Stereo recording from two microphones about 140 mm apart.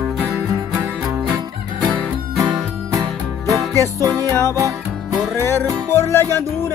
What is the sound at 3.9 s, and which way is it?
Music, 25° right (ahead or behind).